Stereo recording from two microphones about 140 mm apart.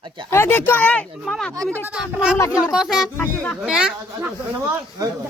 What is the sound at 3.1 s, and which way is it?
Speech, 15° left (ahead or behind).